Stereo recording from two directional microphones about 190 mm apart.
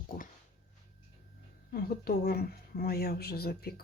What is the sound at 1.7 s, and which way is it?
A woman's voice, 50° left (ahead or behind).